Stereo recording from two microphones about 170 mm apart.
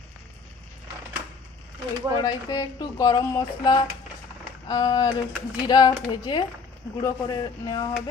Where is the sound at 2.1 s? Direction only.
25° left (ahead or behind).